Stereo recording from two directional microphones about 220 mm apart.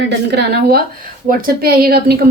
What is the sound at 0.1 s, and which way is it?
A woman's voice, 50° right (ahead or behind).